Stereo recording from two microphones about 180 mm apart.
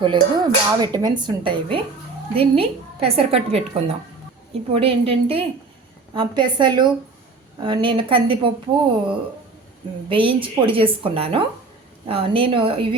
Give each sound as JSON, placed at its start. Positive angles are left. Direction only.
{"t": 0.0, "sound": "a woman's voice", "side_deg": -25}
{"t": 10.1, "sound": "speech", "side_deg": -30}